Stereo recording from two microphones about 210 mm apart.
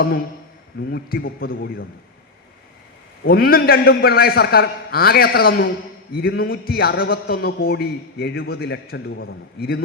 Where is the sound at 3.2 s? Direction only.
45° left (ahead or behind).